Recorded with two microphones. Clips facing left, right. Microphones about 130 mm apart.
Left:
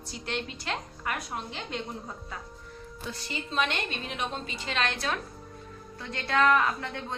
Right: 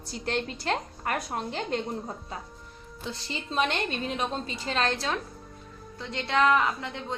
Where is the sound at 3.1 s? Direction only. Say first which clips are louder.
Right 1 dB; 25° right (ahead or behind).